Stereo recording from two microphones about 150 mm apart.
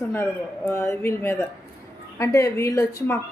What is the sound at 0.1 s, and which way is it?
Speech, 15° left (ahead or behind).